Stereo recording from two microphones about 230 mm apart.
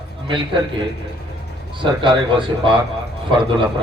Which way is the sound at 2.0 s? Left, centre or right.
Right.